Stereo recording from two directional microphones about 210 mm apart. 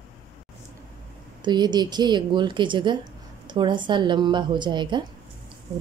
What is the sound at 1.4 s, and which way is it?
Speech, 20° right (ahead or behind).